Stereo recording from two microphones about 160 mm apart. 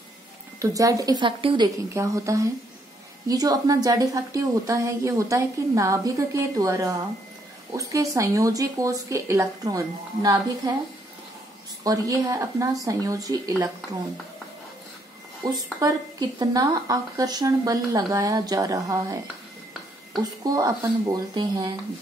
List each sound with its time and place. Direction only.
0.6 s a woman's voice: 20° right (ahead or behind)
2.0 s a woman's voice: 20° right (ahead or behind)
11.8 s a woman's voice: 20° right (ahead or behind)
15.8 s a woman's voice: 25° right (ahead or behind)
20.4 s a woman's voice: 20° right (ahead or behind)